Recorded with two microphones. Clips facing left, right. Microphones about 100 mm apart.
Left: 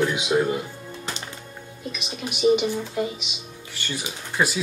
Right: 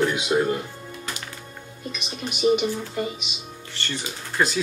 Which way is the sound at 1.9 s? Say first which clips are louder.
Right 1 dB; 5° left (ahead or behind).